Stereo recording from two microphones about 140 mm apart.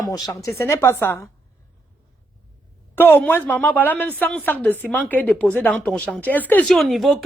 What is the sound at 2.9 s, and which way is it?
A woman's voice, 15° left (ahead or behind).